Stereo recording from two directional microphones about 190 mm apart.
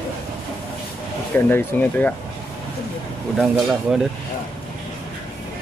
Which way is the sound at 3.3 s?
5° right (ahead or behind).